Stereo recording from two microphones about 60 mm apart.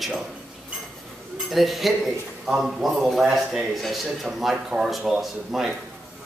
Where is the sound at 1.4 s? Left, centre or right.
Centre.